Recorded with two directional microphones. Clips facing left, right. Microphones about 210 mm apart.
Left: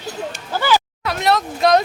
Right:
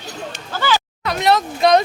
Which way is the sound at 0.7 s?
5° left (ahead or behind).